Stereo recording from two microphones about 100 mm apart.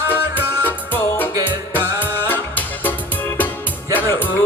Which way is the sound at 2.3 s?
20° left (ahead or behind).